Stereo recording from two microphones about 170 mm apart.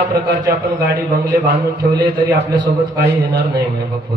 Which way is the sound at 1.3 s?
20° right (ahead or behind).